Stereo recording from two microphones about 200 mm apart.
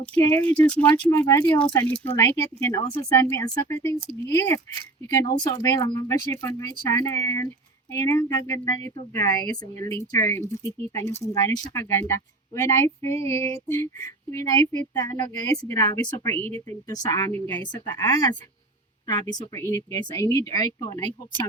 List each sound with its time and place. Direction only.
0.0 s speech: 10° left (ahead or behind)